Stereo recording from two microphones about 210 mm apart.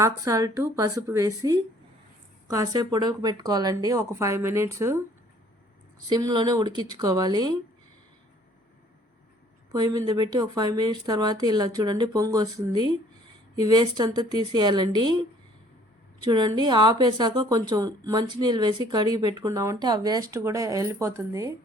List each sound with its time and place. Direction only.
0.0 s speech: 15° right (ahead or behind)
6.1 s a woman's voice: 20° right (ahead or behind)
9.7 s a woman's voice: 20° right (ahead or behind)
16.2 s a woman's voice: 20° right (ahead or behind)